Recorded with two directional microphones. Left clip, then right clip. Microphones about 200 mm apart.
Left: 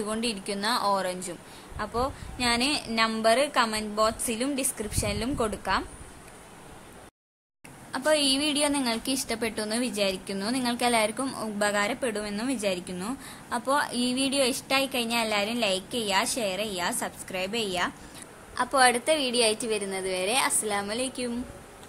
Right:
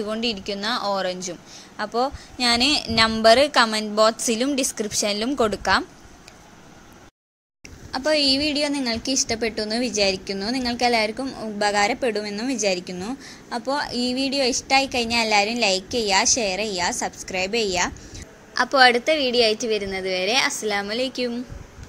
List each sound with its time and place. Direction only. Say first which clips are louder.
0.0 s a woman's voice: right 5 dB; 10° right (ahead or behind)
7.9 s a woman's voice: right 4 dB; 15° right (ahead or behind)